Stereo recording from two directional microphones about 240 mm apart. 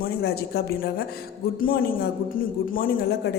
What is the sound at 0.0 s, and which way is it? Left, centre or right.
A woman's voice, left.